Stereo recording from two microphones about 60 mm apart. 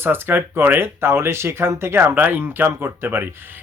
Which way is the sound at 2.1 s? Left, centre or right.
Right.